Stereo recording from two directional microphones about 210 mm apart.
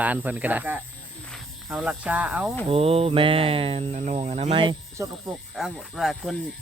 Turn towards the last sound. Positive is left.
turn(degrees=0)  # may be behind; listen again after turning